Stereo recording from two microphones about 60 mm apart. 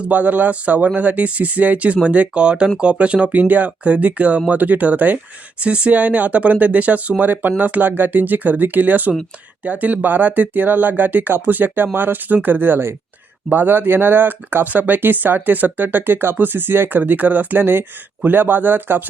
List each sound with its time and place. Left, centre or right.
0.0 s speech: right